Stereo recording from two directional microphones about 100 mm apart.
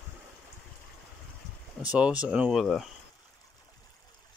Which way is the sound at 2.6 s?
5° left (ahead or behind).